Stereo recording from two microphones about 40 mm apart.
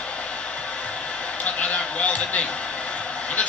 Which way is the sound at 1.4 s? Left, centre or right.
Left.